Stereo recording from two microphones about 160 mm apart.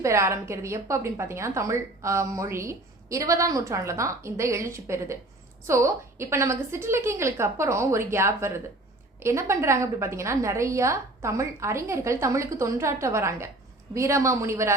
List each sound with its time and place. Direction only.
0.0 s a woman's voice: 15° right (ahead or behind)